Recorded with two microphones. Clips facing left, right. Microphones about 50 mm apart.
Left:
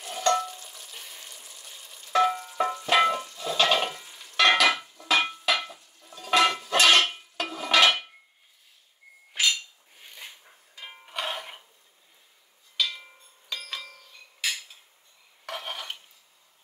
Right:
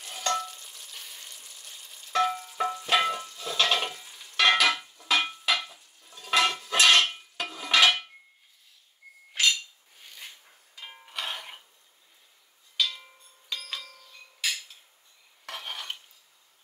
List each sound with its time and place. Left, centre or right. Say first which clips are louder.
0.0 s frying: left 5 dB; centre
4.6 s a sound: left 2 dB; centre
6.4 s dishes: left 1 dB; centre
9.3 s cutlery: even; centre
10.8 s music: left 3 dB; centre
13.5 s a sound: even; centre
15.4 s dishes: left 2 dB; centre